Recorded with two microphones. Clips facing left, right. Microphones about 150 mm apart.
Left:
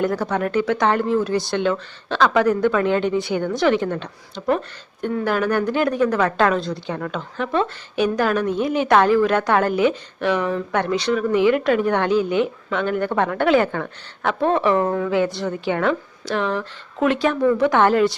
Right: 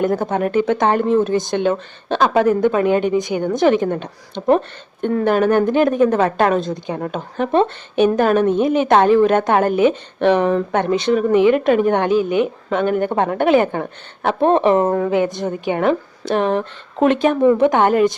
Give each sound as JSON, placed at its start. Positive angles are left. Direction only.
{"t": 0.0, "sound": "a woman's voice", "side_deg": -20}
{"t": 5.2, "sound": "speech", "side_deg": -25}
{"t": 7.2, "sound": "speech", "side_deg": -50}
{"t": 7.5, "sound": "speech", "side_deg": -25}
{"t": 9.9, "sound": "speech", "side_deg": -55}
{"t": 10.7, "sound": "speech", "side_deg": -20}
{"t": 14.8, "sound": "speech", "side_deg": -40}
{"t": 15.1, "sound": "speech", "side_deg": -20}